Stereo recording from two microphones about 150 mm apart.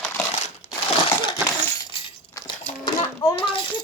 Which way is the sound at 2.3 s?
25° left (ahead or behind).